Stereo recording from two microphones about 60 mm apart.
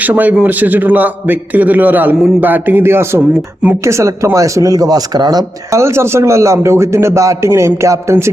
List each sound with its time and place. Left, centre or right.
0.0 s a man's voice: right
3.2 s speech: right
3.8 s speech: right
5.8 s a man's voice: right